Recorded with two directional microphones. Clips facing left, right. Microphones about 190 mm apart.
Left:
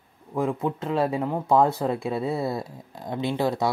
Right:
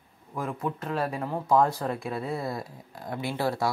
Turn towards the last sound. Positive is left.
turn(degrees=20)  # may be behind; listen again after turning